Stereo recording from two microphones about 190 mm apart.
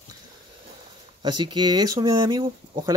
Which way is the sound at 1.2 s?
20° right (ahead or behind).